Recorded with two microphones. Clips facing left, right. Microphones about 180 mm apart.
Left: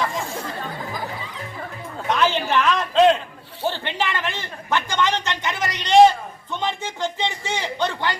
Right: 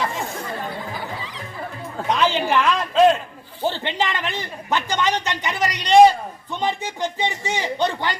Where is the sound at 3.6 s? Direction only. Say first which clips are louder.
Right 2 dB; 15° right (ahead or behind).